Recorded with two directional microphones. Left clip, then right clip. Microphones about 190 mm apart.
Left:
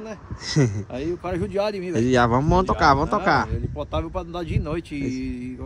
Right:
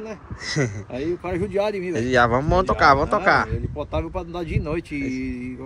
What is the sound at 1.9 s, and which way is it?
Speech, 40° left (ahead or behind).